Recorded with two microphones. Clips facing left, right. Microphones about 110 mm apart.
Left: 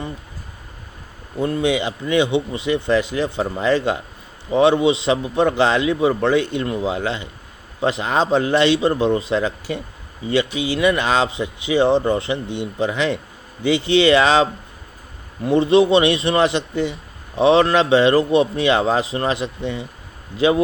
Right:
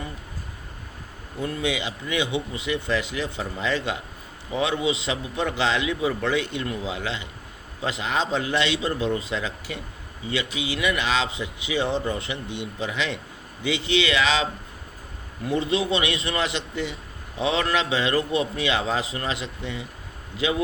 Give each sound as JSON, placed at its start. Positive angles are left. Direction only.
{"t": 1.4, "sound": "speech", "side_deg": 30}
{"t": 4.5, "sound": "a man's voice", "side_deg": 30}